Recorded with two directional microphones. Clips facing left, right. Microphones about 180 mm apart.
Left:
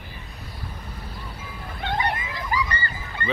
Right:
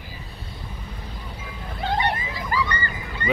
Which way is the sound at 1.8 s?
30° right (ahead or behind).